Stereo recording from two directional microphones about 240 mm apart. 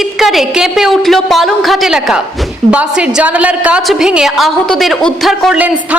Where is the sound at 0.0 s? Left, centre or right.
Centre.